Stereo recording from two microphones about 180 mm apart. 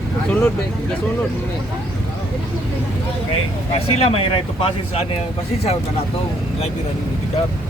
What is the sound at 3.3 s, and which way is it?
Speech, 35° left (ahead or behind).